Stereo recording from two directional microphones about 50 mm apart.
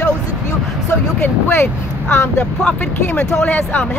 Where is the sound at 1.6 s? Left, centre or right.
Left.